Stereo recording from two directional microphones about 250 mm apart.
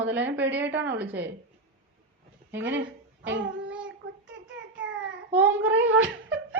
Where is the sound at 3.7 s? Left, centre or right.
Centre.